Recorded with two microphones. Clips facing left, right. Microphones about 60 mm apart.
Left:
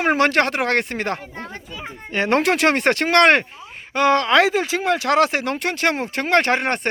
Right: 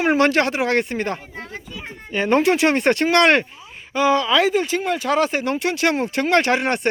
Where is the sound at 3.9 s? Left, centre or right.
Left.